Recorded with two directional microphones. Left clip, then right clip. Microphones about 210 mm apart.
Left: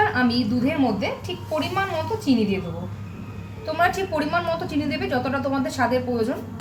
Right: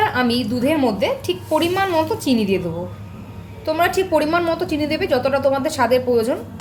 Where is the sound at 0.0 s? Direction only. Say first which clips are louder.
Right 3 dB; 35° right (ahead or behind).